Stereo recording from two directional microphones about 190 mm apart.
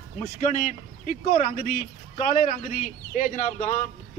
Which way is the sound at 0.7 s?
45° left (ahead or behind).